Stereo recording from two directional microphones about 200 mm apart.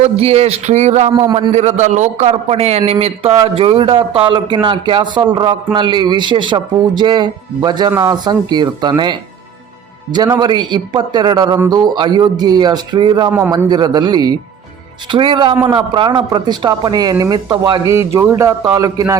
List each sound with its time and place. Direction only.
0.0 s a man's voice: 30° right (ahead or behind)
1.1 s a man's voice: 20° right (ahead or behind)
1.5 s a man's voice: 35° right (ahead or behind)
10.3 s a man's voice: 20° right (ahead or behind)